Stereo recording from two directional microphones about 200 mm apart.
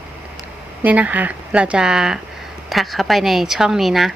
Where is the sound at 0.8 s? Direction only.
5° right (ahead or behind).